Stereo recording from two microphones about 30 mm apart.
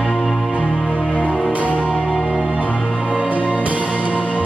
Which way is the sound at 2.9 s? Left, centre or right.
Right.